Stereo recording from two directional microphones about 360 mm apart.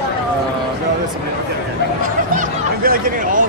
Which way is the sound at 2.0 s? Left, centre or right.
Right.